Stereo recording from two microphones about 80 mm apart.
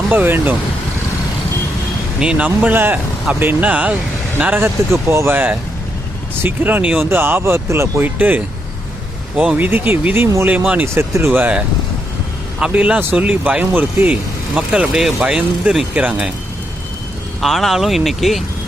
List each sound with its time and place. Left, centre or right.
0.1 s speech: right
2.1 s speech: centre; by 8.0 s right
8.0 s speech: right
9.6 s a man's voice: right
14.5 s speech: centre
17.4 s speech: centre